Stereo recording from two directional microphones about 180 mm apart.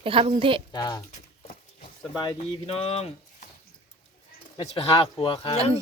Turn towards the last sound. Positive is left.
turn(degrees=30)  # may be behind; listen again after turning